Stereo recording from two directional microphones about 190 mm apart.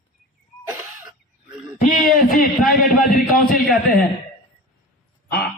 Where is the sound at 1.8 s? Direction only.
45° left (ahead or behind).